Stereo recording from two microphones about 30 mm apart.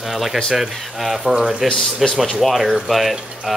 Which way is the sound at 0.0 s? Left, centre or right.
Centre.